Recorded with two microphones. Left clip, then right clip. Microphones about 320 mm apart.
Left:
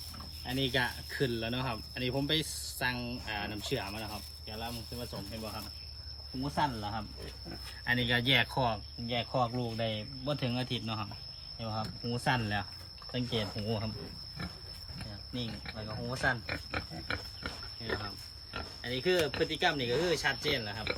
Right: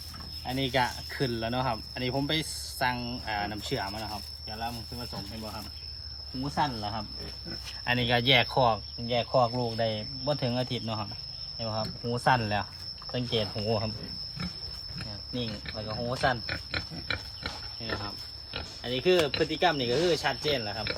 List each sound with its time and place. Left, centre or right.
0.4 s cricket: centre
6.6 s speech: centre
7.9 s cricket: centre
13.7 s speech: right
16.0 s cricket: centre
16.5 s pig: centre
18.9 s cricket: centre
19.4 s speech: centre